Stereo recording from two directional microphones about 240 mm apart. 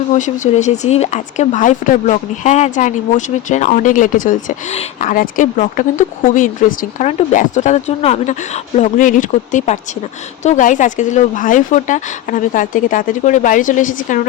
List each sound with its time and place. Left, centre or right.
0.1 s speech: left